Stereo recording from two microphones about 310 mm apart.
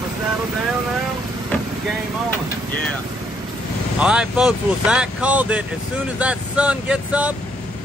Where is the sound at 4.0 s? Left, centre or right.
Centre.